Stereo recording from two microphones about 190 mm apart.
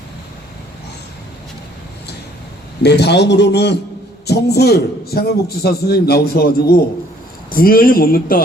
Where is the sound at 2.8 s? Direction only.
60° left (ahead or behind).